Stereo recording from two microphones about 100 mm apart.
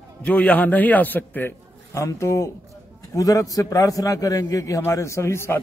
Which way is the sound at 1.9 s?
30° left (ahead or behind).